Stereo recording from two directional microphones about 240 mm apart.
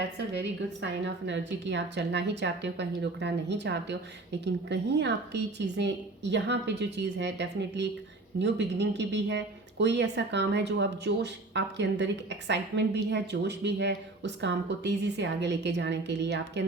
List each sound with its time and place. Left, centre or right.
0.0 s speech: right